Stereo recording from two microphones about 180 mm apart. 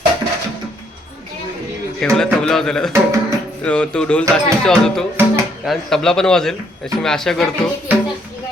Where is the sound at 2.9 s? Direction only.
15° right (ahead or behind).